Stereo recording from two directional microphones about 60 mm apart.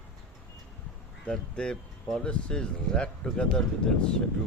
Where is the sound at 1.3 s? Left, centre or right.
Centre.